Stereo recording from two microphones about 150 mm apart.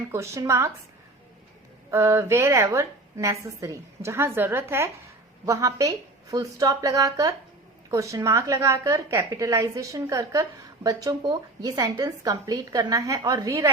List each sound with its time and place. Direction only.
0.1 s speech: 20° right (ahead or behind)
1.9 s a woman's voice: 15° right (ahead or behind)